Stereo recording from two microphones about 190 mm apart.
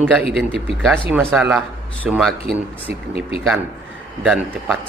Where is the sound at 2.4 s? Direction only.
30° left (ahead or behind).